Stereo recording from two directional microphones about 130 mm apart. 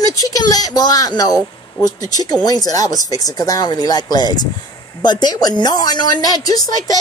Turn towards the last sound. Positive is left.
turn(degrees=30)  # may be behind; listen again after turning